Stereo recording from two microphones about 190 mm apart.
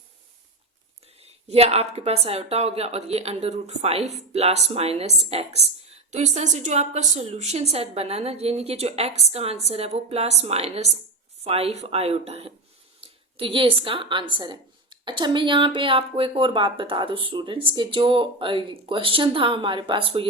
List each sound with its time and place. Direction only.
1.2 s a woman's voice: 35° right (ahead or behind)